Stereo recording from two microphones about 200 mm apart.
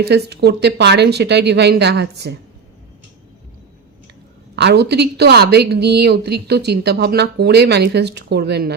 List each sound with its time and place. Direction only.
0.0 s a woman's voice: 55° right (ahead or behind)
4.5 s a woman's voice: 55° right (ahead or behind)